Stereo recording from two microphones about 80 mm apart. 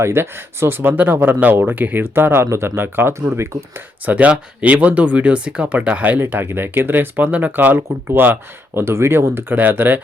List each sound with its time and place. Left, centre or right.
0.0 s speech: right
4.0 s speech: centre